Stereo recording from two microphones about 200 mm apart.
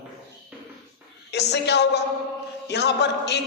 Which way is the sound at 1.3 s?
55° left (ahead or behind).